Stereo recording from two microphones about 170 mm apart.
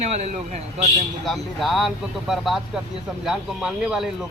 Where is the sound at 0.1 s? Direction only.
40° right (ahead or behind).